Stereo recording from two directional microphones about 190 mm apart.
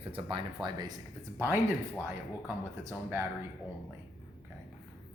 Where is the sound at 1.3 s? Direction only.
10° right (ahead or behind).